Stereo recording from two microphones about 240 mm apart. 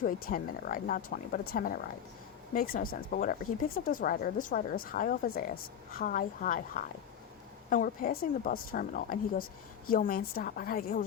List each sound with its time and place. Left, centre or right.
0.0 s speech: left